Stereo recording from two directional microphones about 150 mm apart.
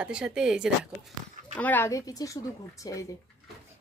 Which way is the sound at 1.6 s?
10° left (ahead or behind).